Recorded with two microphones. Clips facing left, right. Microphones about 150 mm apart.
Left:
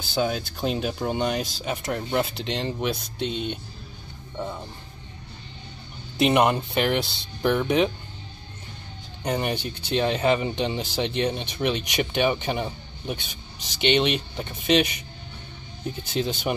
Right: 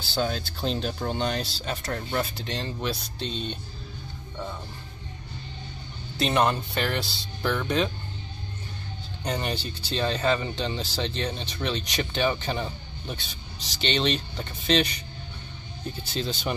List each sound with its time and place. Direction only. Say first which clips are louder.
0.1 s speech: left 3 dB; 10° left (ahead or behind)
6.1 s speech: left 4 dB; 15° left (ahead or behind)
9.2 s speech: left 4 dB; 10° left (ahead or behind)
16.1 s speech: left 4 dB; 15° left (ahead or behind)